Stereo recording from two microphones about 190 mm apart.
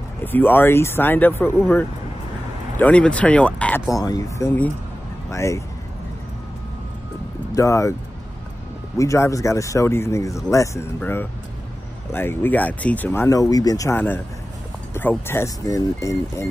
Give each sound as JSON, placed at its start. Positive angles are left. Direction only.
{"t": 0.2, "sound": "speech", "side_deg": 10}
{"t": 3.9, "sound": "speech", "side_deg": 20}
{"t": 7.5, "sound": "speech", "side_deg": 15}
{"t": 8.9, "sound": "speech", "side_deg": 15}